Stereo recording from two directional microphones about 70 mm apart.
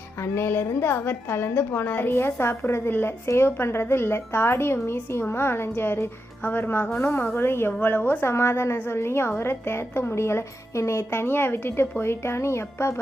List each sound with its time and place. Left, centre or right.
0.2 s a woman's voice: left